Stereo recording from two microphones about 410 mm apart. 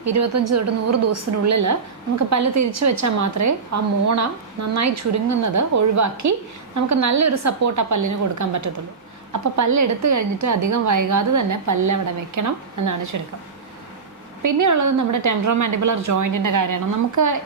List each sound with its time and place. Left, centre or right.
0.0 s a woman's voice: right
14.4 s a woman's voice: right